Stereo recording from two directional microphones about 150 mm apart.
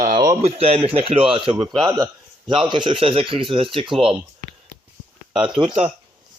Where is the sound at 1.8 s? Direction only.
25° right (ahead or behind).